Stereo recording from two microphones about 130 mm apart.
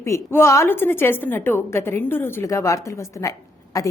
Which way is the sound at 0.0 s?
20° left (ahead or behind).